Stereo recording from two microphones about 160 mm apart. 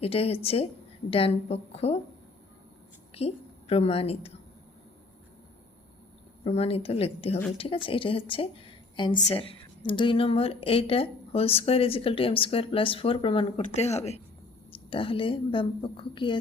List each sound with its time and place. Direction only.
0.0 s a woman's voice: 40° left (ahead or behind)
3.2 s a woman's voice: 40° left (ahead or behind)
6.4 s a woman's voice: 40° left (ahead or behind)